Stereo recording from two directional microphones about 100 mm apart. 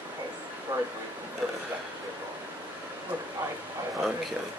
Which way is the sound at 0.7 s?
25° right (ahead or behind).